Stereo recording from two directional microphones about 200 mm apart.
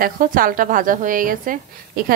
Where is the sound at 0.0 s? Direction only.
45° right (ahead or behind).